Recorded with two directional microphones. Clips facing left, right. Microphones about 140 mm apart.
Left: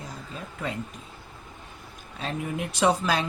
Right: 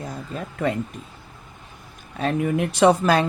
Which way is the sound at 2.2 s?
60° right (ahead or behind).